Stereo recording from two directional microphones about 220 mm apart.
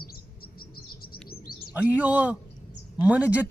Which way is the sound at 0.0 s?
45° left (ahead or behind).